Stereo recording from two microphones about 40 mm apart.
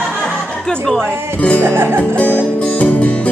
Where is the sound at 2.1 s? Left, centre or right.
Left.